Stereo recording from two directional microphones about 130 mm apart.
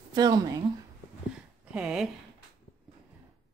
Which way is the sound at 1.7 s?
5° right (ahead or behind).